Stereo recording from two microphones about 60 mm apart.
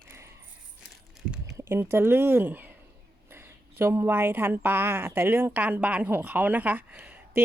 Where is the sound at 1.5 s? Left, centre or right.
Right.